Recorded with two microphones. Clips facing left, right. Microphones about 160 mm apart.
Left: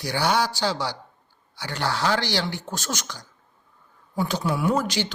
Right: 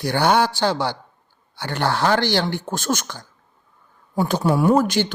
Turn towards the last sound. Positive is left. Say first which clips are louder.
# right 6 dB
turn(degrees=-55)  # may be behind; listen again after turning